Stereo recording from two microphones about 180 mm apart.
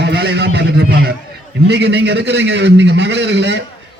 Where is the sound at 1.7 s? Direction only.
70° right (ahead or behind).